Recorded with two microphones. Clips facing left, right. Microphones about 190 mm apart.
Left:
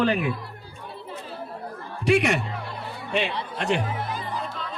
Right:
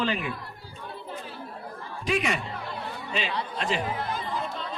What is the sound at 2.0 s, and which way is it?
Battle cry, 75° left (ahead or behind).